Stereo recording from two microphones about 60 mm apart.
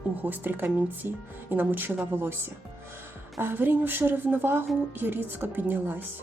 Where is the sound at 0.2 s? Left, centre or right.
Right.